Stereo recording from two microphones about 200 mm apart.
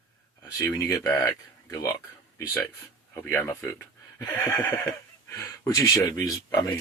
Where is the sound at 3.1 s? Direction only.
10° left (ahead or behind).